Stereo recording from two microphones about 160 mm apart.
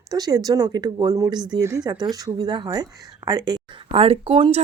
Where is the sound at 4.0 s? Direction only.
35° right (ahead or behind).